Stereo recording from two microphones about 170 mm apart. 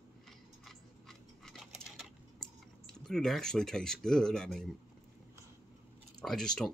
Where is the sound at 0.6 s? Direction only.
Centre (ahead or behind).